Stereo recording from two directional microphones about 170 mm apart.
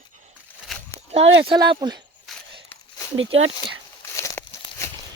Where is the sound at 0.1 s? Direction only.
45° right (ahead or behind).